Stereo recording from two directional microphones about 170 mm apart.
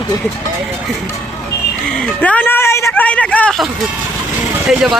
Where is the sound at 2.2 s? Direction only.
10° left (ahead or behind).